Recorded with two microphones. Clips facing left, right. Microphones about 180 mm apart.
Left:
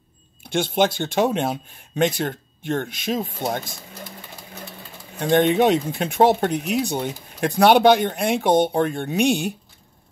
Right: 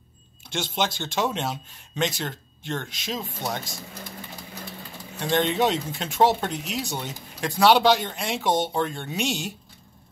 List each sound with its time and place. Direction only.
0.4 s speech: 55° left (ahead or behind)
5.2 s speech: 55° left (ahead or behind)